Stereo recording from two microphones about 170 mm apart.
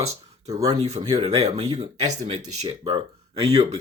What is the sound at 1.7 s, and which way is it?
Speech, 40° right (ahead or behind).